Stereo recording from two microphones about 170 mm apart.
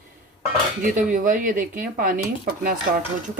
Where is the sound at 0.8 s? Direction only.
50° right (ahead or behind).